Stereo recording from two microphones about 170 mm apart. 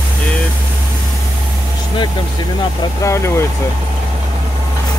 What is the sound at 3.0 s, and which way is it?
Speech, 15° left (ahead or behind).